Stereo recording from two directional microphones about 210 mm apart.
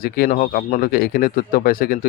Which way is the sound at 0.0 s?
45° left (ahead or behind).